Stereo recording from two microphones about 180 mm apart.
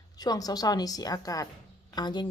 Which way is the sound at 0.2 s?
20° left (ahead or behind).